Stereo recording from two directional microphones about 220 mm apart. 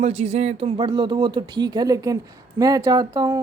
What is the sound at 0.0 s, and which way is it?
A woman's voice, 30° right (ahead or behind).